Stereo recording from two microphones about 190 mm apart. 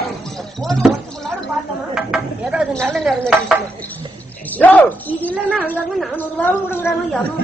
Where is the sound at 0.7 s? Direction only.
Centre (ahead or behind).